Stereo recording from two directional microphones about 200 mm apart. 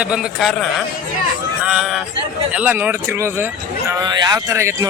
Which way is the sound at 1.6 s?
5° right (ahead or behind).